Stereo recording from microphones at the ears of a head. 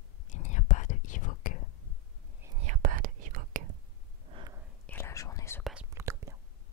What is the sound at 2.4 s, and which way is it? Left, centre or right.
Whispering, right.